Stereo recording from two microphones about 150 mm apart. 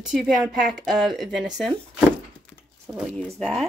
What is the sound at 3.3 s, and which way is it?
Speech, 5° left (ahead or behind).